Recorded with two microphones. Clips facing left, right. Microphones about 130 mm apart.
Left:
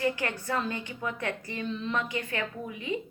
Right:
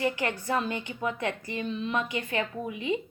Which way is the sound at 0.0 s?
20° right (ahead or behind).